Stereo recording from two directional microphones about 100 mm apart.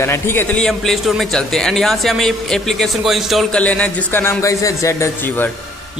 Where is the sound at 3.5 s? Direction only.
15° left (ahead or behind); by 5.4 s 30° left (ahead or behind).